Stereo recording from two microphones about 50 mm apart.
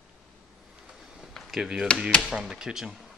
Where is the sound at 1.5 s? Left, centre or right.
Centre.